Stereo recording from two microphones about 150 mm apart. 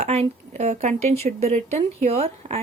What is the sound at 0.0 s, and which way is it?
Speech, 45° right (ahead or behind).